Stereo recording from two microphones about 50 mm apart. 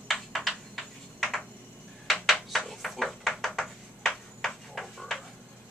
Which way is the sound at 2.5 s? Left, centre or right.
Centre.